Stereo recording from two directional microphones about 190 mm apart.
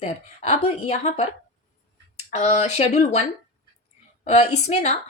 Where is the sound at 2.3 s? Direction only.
35° left (ahead or behind).